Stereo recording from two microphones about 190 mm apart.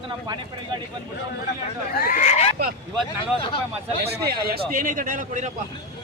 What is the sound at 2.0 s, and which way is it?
Speech, 45° left (ahead or behind).